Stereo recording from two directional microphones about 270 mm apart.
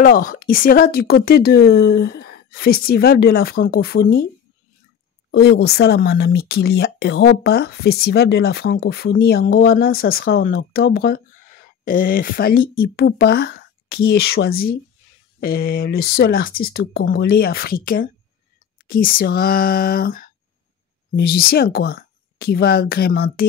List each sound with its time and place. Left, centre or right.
0.0 s speech: left
5.3 s speech: left